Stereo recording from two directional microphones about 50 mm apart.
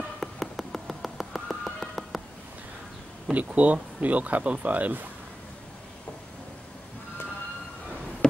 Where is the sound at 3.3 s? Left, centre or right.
Right.